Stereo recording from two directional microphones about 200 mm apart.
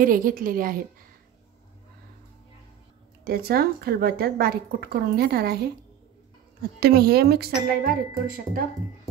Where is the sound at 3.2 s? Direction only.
50° right (ahead or behind).